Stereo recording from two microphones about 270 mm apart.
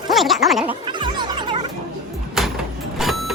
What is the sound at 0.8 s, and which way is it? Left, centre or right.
Music, centre.